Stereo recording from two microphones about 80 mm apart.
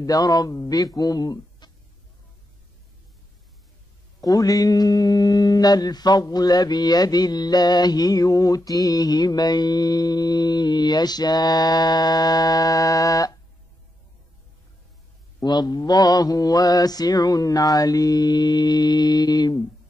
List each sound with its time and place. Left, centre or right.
0.0 s speech: left
4.2 s mantra: left
15.4 s mantra: left